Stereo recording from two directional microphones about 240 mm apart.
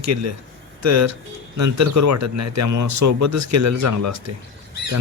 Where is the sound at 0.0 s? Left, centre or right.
Right.